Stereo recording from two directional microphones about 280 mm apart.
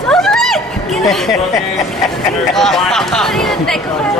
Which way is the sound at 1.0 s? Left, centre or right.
Centre.